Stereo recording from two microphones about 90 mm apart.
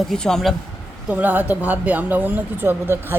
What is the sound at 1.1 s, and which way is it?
Speech, 15° right (ahead or behind).